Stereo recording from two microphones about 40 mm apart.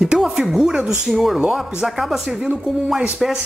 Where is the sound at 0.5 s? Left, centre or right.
Centre.